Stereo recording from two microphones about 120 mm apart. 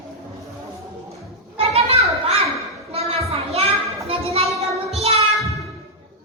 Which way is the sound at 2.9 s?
60° right (ahead or behind).